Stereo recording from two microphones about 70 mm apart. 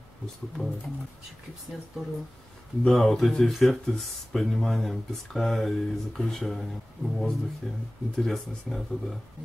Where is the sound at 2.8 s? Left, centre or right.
Centre.